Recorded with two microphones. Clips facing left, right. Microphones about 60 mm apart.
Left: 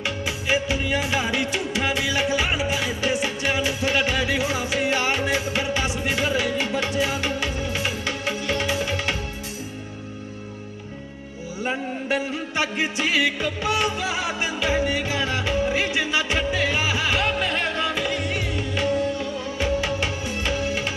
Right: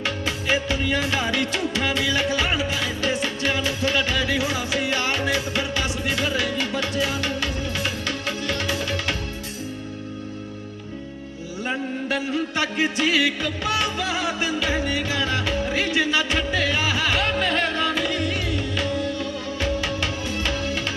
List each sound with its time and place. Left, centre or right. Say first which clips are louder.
0.0 s music: right 1 dB; centre
11.6 s music: even; left